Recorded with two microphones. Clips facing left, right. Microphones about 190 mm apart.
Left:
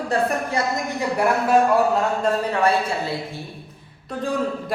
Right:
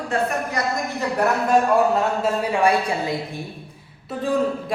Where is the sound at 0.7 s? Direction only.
10° left (ahead or behind).